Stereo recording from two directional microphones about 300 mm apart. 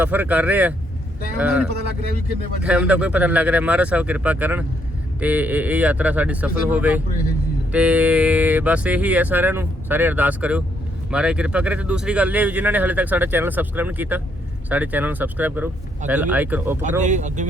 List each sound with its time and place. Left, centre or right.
0.0 s speech: centre
2.6 s speech: centre
17.0 s speech: right